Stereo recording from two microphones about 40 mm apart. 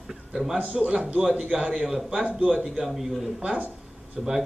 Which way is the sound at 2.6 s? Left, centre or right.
Centre.